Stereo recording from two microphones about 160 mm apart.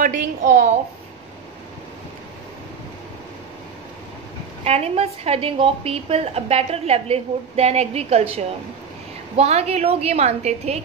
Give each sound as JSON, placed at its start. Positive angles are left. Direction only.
{"t": 0.0, "sound": "a woman's voice", "side_deg": -55}
{"t": 4.6, "sound": "a woman's voice", "side_deg": -40}